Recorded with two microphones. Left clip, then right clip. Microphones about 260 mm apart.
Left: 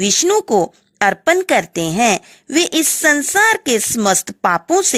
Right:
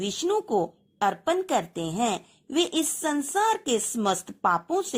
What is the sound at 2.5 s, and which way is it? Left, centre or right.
Speech, left.